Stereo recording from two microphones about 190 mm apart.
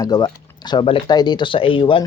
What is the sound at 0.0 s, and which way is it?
Speech, 20° left (ahead or behind).